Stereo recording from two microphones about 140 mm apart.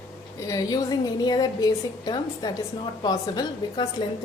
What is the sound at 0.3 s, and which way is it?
A woman's voice, 25° left (ahead or behind).